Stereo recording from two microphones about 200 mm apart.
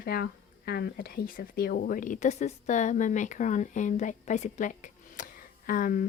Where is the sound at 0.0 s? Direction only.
50° left (ahead or behind).